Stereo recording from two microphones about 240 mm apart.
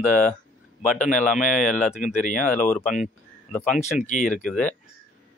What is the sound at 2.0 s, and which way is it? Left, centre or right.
Speech, left.